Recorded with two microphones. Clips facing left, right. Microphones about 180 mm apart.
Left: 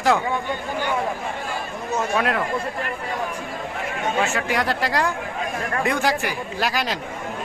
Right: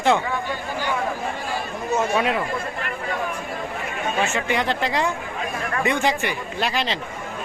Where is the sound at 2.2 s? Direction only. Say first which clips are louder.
Even; 5° right (ahead or behind).